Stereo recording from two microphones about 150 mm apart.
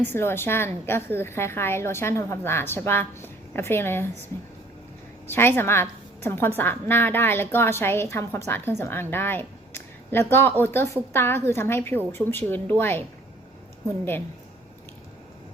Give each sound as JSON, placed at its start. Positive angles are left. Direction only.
{"t": 0.0, "sound": "a woman's voice", "side_deg": 15}
{"t": 5.3, "sound": "a woman's voice", "side_deg": 15}